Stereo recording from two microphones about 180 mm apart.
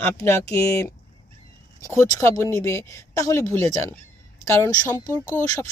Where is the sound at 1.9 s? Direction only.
15° left (ahead or behind).